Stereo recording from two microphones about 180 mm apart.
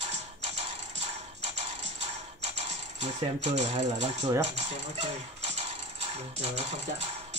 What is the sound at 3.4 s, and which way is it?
Speech, 40° right (ahead or behind).